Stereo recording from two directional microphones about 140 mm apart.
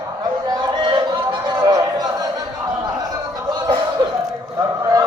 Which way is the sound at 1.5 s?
30° right (ahead or behind).